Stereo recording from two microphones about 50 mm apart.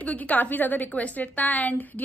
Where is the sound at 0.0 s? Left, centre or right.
Left.